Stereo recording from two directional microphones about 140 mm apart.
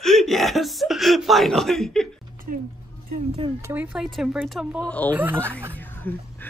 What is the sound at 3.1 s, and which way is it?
Speech, 45° right (ahead or behind).